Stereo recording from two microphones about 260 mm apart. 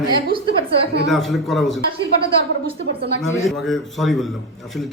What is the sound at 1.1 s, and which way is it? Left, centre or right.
Speech, centre.